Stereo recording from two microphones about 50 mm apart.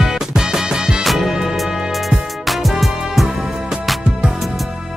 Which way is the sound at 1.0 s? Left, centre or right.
Centre.